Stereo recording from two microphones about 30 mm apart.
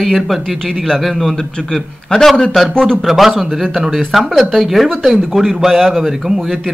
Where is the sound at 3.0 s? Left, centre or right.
Centre.